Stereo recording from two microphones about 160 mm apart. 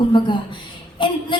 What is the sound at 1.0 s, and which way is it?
Speech, 30° left (ahead or behind).